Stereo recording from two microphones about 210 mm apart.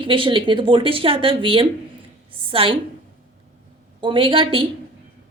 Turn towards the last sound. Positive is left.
turn(degrees=-25)  # may be behind; listen again after turning